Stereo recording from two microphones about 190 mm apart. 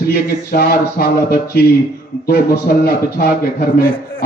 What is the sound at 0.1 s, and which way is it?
Speech, 55° left (ahead or behind).